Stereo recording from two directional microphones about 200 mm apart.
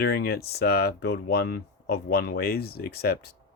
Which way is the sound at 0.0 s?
50° left (ahead or behind).